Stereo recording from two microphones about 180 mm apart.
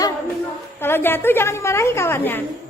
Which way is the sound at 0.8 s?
10° left (ahead or behind).